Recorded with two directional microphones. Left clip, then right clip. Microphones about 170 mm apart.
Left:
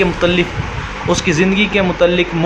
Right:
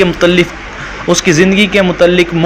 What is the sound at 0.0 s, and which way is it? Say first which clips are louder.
Speech: right 5 dB; 20° right (ahead or behind).